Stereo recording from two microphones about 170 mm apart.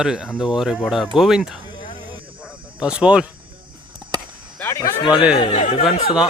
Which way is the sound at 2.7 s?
5° right (ahead or behind).